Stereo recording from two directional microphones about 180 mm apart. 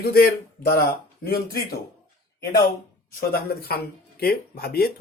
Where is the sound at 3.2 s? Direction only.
55° left (ahead or behind).